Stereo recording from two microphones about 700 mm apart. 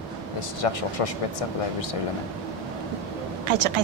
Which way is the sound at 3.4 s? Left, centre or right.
Right.